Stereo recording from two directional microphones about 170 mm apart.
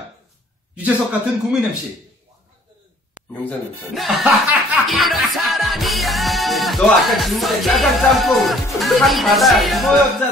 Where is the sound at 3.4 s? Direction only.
Centre (ahead or behind).